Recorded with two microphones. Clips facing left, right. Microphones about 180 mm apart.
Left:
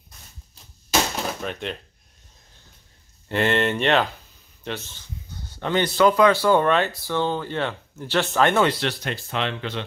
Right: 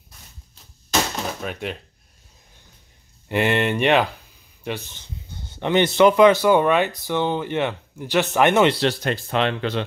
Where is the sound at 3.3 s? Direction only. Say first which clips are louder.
Right 1 dB; 10° right (ahead or behind).